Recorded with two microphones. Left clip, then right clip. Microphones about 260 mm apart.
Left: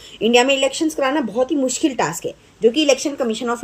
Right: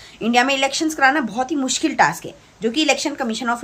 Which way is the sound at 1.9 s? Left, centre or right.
Centre.